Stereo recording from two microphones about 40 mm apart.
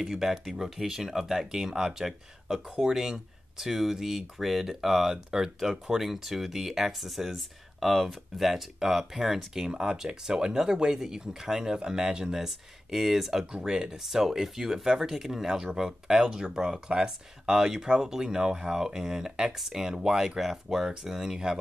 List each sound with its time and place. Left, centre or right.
0.0 s speech: centre